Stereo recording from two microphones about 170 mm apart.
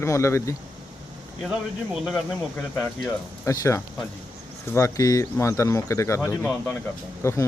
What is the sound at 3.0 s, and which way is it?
Speech, 20° left (ahead or behind).